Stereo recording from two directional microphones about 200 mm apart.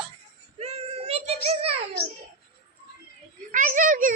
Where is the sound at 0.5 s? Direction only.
30° right (ahead or behind).